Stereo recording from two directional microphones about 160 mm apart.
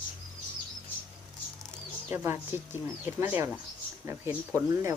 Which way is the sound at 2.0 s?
15° right (ahead or behind).